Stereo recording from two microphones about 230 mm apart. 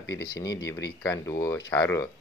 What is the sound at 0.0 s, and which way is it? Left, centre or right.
Speech, left.